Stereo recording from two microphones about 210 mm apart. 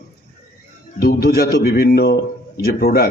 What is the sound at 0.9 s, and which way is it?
A man's voice, 45° left (ahead or behind).